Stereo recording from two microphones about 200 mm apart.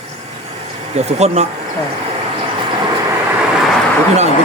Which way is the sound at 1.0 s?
35° right (ahead or behind).